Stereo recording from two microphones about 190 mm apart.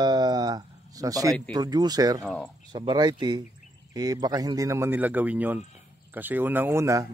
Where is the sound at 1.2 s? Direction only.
5° left (ahead or behind).